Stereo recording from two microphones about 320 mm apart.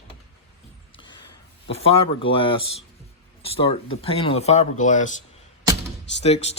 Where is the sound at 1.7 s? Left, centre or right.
Centre.